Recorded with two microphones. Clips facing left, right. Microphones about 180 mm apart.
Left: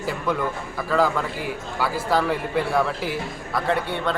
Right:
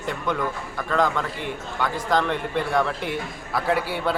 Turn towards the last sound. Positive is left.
turn(degrees=-5)  # may be behind; listen again after turning